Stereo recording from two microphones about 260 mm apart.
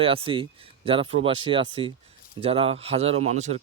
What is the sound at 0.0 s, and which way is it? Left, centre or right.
Speech, right.